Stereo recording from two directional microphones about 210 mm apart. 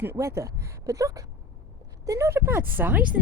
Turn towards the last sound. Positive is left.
turn(degrees=-10)  # may be behind; listen again after turning